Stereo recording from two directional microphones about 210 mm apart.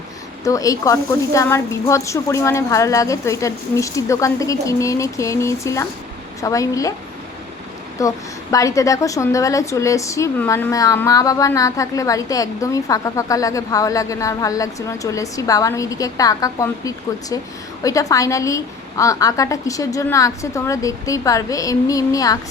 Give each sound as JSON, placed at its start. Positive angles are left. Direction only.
{"t": 0.4, "sound": "a woman's voice", "side_deg": 15}
{"t": 7.9, "sound": "a woman's voice", "side_deg": 15}